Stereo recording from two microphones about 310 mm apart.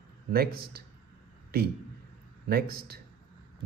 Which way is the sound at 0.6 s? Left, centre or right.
Right.